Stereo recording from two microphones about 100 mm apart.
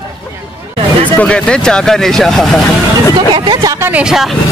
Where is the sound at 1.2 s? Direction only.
10° left (ahead or behind).